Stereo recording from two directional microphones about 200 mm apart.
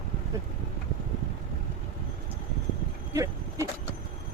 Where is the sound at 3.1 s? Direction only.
15° right (ahead or behind).